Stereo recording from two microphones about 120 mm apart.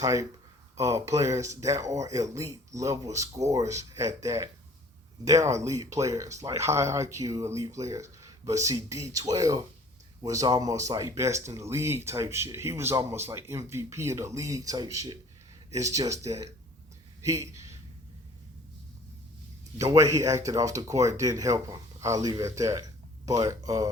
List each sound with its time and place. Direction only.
0.0 s speech: 25° right (ahead or behind)
17.2 s speech: 25° right (ahead or behind)
19.8 s speech: 25° right (ahead or behind)